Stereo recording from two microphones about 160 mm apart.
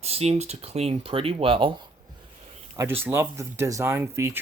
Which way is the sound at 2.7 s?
15° right (ahead or behind).